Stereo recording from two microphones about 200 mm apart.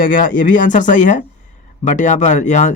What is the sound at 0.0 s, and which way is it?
Speech, 45° left (ahead or behind).